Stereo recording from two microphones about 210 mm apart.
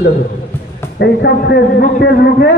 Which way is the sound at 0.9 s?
55° left (ahead or behind).